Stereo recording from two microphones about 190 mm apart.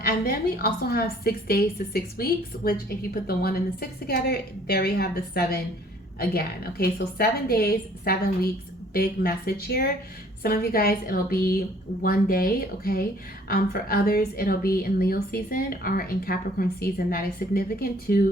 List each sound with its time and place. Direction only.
0.0 s a woman's voice: 55° left (ahead or behind)